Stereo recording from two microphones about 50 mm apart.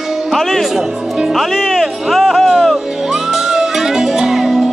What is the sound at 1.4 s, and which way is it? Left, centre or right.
Music, centre.